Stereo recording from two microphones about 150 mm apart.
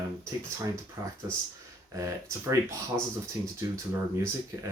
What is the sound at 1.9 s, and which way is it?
Speech, 20° right (ahead or behind).